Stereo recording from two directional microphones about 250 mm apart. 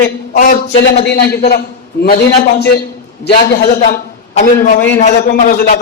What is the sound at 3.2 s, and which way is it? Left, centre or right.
A man's voice, left.